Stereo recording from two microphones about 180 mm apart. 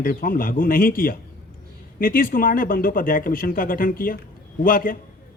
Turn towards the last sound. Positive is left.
turn(degrees=50)  # may be behind; listen again after turning